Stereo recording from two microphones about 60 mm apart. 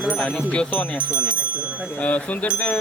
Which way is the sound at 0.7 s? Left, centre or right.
Left.